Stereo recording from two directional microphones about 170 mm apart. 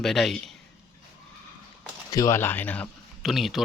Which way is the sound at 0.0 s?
Centre (ahead or behind).